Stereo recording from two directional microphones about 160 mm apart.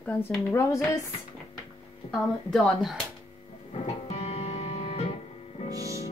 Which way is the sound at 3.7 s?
40° left (ahead or behind).